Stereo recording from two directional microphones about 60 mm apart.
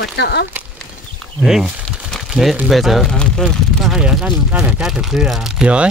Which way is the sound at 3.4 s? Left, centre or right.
Centre.